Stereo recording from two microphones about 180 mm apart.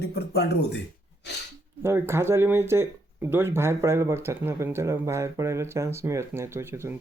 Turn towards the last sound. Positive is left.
turn(degrees=-15)  # may be behind; listen again after turning